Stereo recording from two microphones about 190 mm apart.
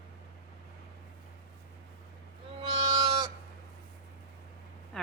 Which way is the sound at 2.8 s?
20° right (ahead or behind).